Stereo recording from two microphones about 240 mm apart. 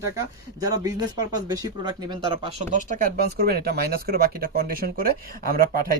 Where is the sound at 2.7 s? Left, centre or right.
Right.